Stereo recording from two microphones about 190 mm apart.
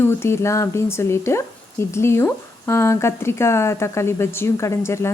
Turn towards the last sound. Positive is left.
turn(degrees=15)  # may be behind; listen again after turning